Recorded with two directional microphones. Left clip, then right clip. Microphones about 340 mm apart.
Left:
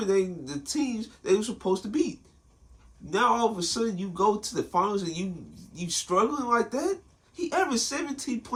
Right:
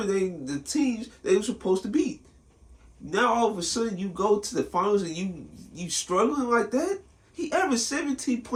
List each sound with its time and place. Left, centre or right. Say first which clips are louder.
0.1 s speech: left 1 dB; centre
3.1 s speech: right 1 dB; centre